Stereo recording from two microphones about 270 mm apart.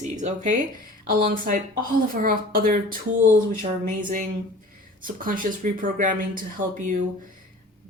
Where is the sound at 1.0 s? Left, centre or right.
Right.